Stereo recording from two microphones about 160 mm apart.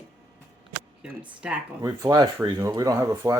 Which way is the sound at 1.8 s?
20° right (ahead or behind).